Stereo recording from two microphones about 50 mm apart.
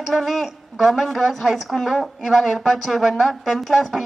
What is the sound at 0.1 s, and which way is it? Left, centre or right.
A woman's voice, centre.